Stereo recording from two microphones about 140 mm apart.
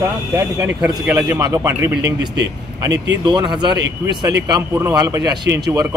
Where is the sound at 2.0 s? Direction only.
30° right (ahead or behind).